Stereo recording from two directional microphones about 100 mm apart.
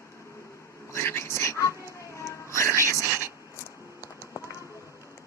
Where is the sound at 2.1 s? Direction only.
30° left (ahead or behind).